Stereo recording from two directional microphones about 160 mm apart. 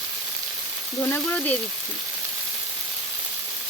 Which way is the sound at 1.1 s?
10° left (ahead or behind).